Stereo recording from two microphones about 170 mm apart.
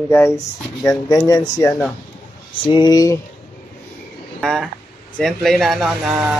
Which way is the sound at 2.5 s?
30° left (ahead or behind).